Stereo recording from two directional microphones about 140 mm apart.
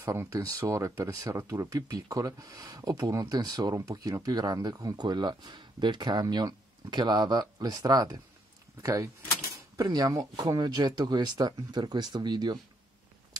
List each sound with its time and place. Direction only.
0.0 s speech: 20° right (ahead or behind)